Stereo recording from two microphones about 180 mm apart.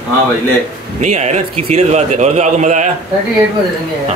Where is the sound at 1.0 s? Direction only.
40° right (ahead or behind).